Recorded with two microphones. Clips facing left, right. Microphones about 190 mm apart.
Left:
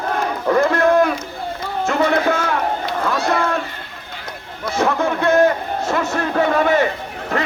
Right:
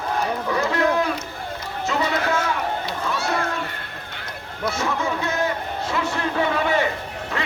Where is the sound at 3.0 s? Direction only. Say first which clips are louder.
Left 5 dB; 60° left (ahead or behind).